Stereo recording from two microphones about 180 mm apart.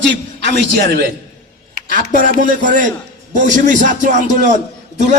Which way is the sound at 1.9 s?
50° right (ahead or behind).